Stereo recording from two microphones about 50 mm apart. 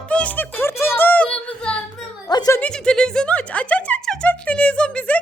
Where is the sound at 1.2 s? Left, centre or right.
Left.